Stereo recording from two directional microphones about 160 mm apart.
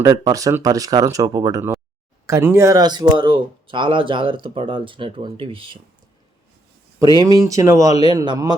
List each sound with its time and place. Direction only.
0.0 s speech: 25° right (ahead or behind)
7.2 s speech: 25° right (ahead or behind)